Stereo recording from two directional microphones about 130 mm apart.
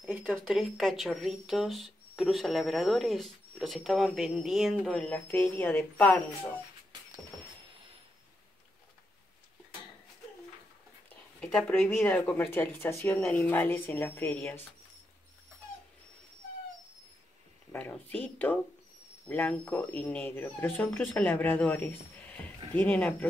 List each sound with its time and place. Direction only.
0.3 s speech: centre (ahead or behind)
4.9 s speech: 10° left (ahead or behind)
11.3 s speech: 10° left (ahead or behind)
17.7 s speech: 15° left (ahead or behind)